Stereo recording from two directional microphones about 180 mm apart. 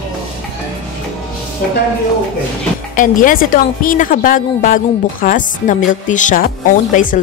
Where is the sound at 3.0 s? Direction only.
50° left (ahead or behind).